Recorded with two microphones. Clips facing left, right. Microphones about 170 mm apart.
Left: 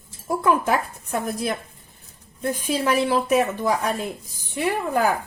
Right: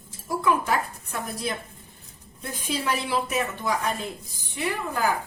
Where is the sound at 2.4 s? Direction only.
45° left (ahead or behind).